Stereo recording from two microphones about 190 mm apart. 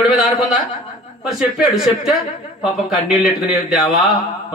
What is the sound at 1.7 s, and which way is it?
A man's voice, centre (ahead or behind).